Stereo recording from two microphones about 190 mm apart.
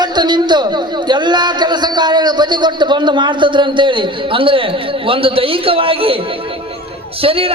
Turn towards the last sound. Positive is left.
turn(degrees=-30)  # may be behind; listen again after turning